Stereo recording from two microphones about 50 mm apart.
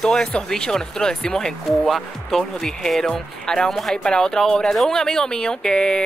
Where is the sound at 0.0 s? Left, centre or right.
Centre.